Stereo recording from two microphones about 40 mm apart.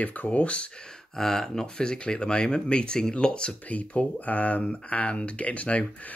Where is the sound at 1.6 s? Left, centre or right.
Left.